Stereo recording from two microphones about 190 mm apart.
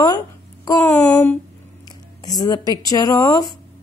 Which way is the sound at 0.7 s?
20° left (ahead or behind).